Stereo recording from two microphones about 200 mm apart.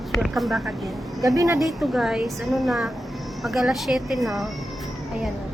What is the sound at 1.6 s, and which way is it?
Speech, centre (ahead or behind).